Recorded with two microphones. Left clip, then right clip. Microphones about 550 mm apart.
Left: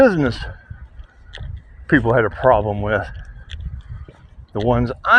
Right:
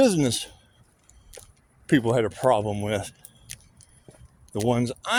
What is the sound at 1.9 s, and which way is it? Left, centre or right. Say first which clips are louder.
Speech: left 6 dB; right.